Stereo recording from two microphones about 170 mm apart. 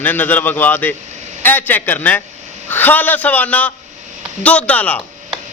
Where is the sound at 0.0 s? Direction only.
10° left (ahead or behind).